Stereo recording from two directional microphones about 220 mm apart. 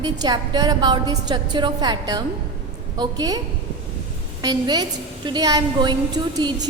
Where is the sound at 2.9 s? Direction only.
20° right (ahead or behind).